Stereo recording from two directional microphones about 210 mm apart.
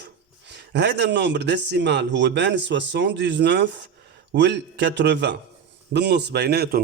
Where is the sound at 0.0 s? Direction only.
55° right (ahead or behind).